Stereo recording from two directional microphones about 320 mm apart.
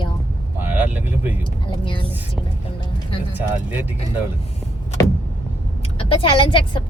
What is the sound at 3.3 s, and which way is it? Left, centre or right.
Speech, centre.